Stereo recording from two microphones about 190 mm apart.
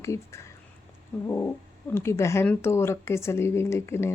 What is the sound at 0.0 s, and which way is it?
A woman's voice, 15° left (ahead or behind).